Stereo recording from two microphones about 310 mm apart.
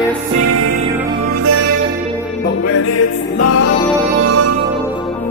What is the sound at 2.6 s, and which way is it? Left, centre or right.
Music, left.